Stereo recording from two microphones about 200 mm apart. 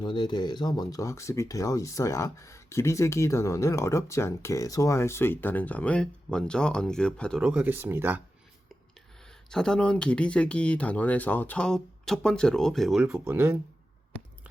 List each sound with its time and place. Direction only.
0.0 s speech: 20° left (ahead or behind); by 8.2 s 10° right (ahead or behind)
9.5 s speech: 5° left (ahead or behind)